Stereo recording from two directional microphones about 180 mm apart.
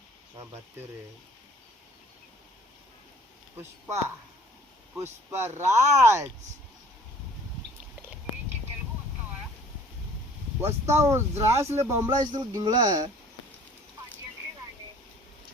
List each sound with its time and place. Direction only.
3.6 s speech: 15° right (ahead or behind)
5.3 s speech: 15° right (ahead or behind)
10.6 s speech: 15° right (ahead or behind)